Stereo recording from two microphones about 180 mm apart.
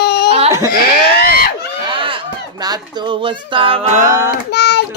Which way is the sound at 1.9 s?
30° right (ahead or behind).